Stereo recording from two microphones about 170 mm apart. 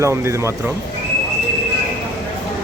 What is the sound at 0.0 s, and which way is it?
Speech, 15° right (ahead or behind).